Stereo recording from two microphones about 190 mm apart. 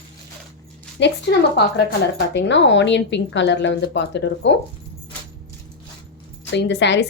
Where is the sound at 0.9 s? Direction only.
65° left (ahead or behind).